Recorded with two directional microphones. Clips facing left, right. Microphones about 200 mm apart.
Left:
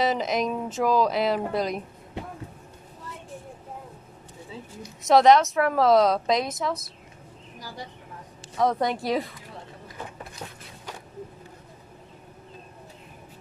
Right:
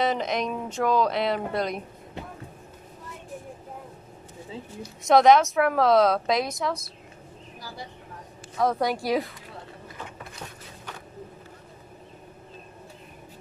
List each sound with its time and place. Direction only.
0.0 s a woman's voice: centre (ahead or behind)
5.0 s a woman's voice: centre (ahead or behind)
8.5 s a woman's voice: centre (ahead or behind)